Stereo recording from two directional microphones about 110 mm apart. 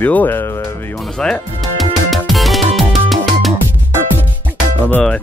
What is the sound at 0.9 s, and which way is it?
Speech, 5° left (ahead or behind).